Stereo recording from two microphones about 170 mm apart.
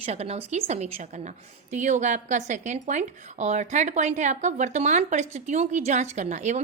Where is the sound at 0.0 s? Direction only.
40° right (ahead or behind).